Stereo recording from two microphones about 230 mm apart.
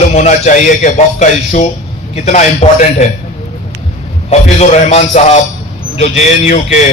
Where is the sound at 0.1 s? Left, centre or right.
Left.